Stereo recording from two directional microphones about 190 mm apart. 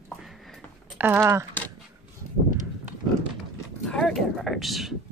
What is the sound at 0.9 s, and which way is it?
Speech, 10° right (ahead or behind).